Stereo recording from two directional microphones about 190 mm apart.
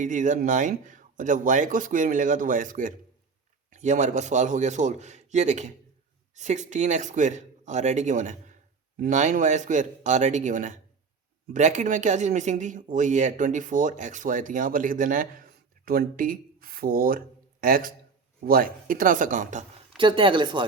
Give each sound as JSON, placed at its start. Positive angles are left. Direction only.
{"t": 0.0, "sound": "a man's voice", "side_deg": -40}
{"t": 20.0, "sound": "speech", "side_deg": -25}